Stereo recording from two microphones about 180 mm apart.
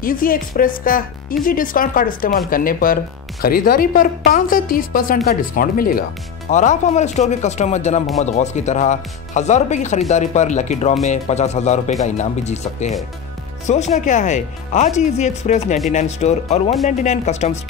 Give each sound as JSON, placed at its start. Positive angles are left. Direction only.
{"t": 0.0, "sound": "speech", "side_deg": 50}
{"t": 6.5, "sound": "speech", "side_deg": 40}